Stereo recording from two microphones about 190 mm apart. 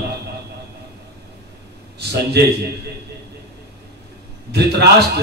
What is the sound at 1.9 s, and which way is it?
Speech, 60° right (ahead or behind).